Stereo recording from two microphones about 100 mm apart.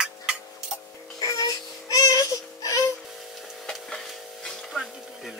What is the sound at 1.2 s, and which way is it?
Music, 35° left (ahead or behind).